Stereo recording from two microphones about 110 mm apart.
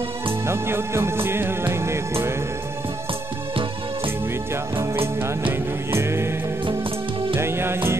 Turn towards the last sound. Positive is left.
turn(degrees=-20)  # may be behind; listen again after turning